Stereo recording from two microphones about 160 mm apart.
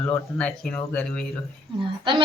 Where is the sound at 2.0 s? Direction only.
30° right (ahead or behind).